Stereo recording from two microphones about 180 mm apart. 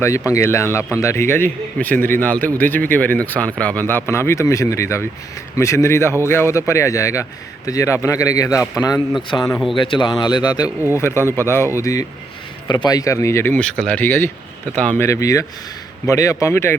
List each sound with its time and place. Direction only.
0.3 s a man's voice: 15° left (ahead or behind)